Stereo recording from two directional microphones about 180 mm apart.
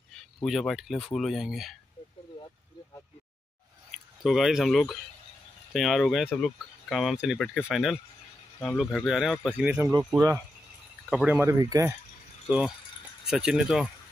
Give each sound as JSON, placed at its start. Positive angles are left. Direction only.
{"t": 0.1, "sound": "speech", "side_deg": 0}
{"t": 4.2, "sound": "speech", "side_deg": 0}
{"t": 9.8, "sound": "speech", "side_deg": -15}
{"t": 11.1, "sound": "speech", "side_deg": -5}